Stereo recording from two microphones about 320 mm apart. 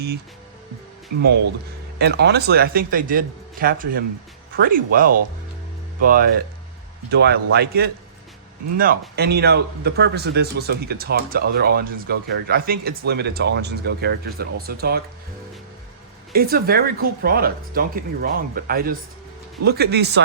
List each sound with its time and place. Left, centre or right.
2.0 s speech: right
16.3 s speech: right